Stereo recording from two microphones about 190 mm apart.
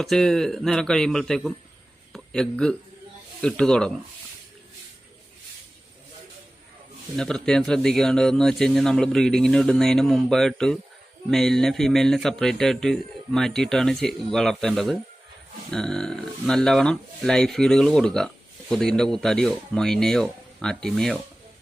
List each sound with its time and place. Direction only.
0.0 s a man's voice: centre (ahead or behind)
7.2 s a man's voice: 5° left (ahead or behind)